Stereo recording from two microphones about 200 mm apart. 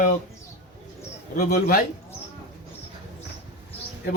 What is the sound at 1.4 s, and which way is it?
Speech, 50° left (ahead or behind).